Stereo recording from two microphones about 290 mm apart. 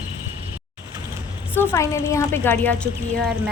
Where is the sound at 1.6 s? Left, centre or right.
Centre.